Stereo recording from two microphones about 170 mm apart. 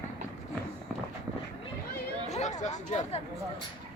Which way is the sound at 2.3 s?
40° left (ahead or behind).